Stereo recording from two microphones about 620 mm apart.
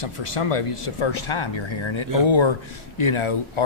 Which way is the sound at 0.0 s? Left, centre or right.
Left.